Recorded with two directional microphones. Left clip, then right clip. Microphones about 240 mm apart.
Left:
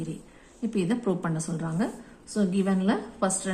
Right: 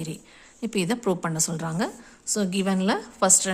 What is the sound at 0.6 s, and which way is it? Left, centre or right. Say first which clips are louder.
A woman's voice: right 2 dB; right.